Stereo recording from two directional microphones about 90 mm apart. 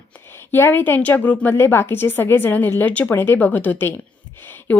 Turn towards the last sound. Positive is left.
turn(degrees=20)  # may be behind; listen again after turning